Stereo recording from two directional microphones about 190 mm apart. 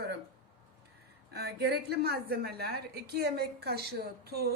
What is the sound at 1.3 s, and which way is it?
Speech, 60° right (ahead or behind).